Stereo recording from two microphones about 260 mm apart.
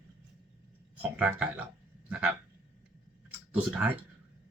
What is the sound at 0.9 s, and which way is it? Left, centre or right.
Speech, centre.